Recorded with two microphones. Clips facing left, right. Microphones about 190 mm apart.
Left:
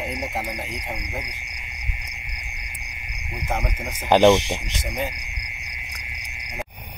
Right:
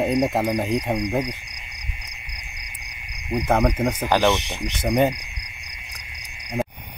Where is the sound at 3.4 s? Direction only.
65° right (ahead or behind).